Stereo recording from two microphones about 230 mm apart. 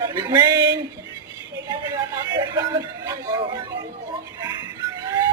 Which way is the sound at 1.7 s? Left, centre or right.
Centre.